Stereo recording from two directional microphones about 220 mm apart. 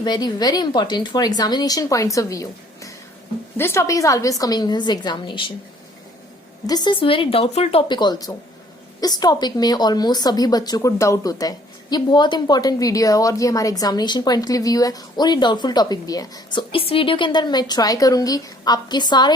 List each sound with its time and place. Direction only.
0.0 s a woman's voice: 20° left (ahead or behind)
6.7 s a woman's voice: 20° left (ahead or behind)